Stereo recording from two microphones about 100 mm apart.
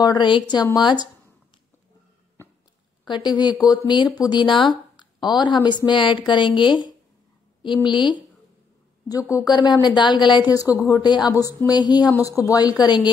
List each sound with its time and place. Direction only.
0.0 s speech: 50° left (ahead or behind)
3.6 s speech: 45° left (ahead or behind)
10.5 s speech: 35° left (ahead or behind)
11.0 s speech: 45° left (ahead or behind)
12.2 s speech: 35° left (ahead or behind)